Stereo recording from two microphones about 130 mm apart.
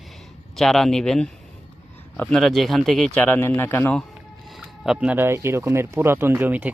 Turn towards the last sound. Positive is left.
turn(degrees=-15)  # may be behind; listen again after turning